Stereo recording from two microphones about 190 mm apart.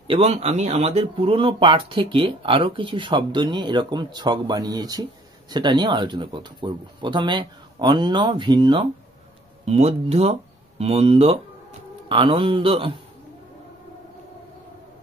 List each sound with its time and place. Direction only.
0.1 s speech: 35° right (ahead or behind)